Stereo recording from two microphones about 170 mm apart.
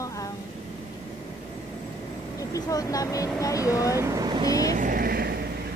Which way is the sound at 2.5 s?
20° left (ahead or behind).